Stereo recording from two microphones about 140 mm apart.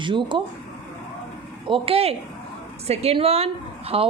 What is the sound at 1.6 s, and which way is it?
A woman's voice, 40° right (ahead or behind).